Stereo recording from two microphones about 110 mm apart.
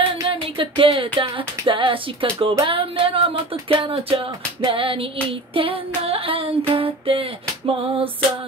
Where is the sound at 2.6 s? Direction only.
55° right (ahead or behind).